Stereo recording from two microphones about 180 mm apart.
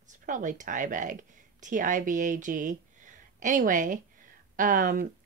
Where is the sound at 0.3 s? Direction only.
45° right (ahead or behind).